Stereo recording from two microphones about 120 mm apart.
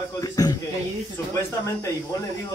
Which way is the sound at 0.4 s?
30° left (ahead or behind).